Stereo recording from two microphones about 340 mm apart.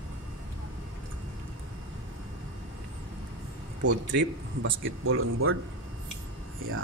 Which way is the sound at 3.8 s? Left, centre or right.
Right.